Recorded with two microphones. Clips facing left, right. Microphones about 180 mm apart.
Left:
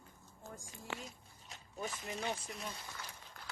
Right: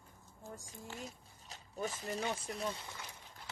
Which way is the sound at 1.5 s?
40° right (ahead or behind).